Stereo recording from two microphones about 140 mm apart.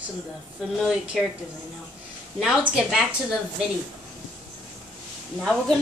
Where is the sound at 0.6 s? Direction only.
5° right (ahead or behind).